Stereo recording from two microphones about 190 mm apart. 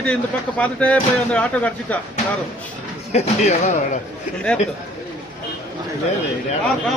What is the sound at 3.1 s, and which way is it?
Speech, 35° left (ahead or behind).